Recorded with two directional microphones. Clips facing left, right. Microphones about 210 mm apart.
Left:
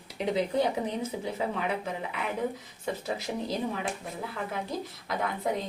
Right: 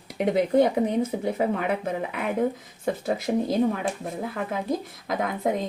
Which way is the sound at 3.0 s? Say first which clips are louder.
Right 10 dB; 50° right (ahead or behind).